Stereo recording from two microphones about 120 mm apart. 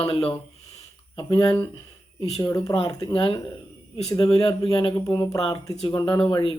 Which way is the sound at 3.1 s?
45° left (ahead or behind).